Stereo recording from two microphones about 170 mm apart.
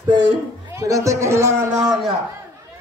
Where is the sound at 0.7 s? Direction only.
20° right (ahead or behind).